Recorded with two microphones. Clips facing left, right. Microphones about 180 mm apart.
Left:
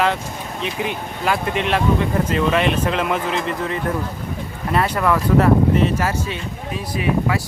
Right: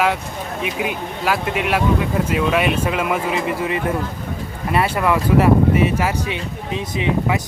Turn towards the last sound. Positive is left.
turn(degrees=-20)  # may be behind; listen again after turning